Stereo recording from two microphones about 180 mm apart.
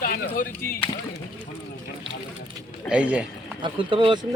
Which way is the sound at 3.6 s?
30° right (ahead or behind).